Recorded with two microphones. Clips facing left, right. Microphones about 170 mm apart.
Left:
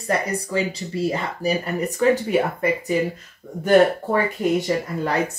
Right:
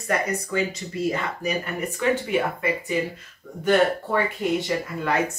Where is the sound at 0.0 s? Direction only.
35° left (ahead or behind).